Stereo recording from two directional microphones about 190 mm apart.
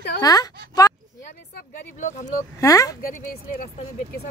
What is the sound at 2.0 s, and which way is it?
Speech, 40° left (ahead or behind).